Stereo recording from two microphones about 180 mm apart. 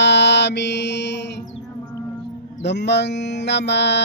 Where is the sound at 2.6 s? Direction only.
75° left (ahead or behind).